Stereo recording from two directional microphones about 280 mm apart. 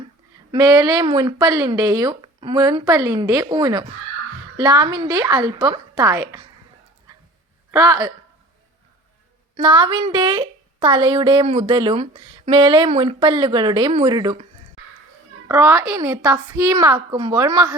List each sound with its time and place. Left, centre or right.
0.5 s a woman's voice: centre
7.7 s a woman's voice: centre
9.6 s a woman's voice: centre
15.4 s a woman's voice: centre